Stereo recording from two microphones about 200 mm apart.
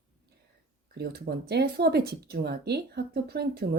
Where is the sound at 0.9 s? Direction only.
55° right (ahead or behind).